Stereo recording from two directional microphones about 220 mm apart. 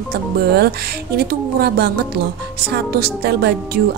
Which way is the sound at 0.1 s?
45° right (ahead or behind).